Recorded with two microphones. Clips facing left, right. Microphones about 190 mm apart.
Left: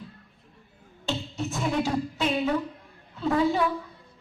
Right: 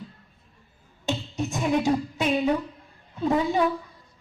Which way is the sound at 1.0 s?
15° right (ahead or behind).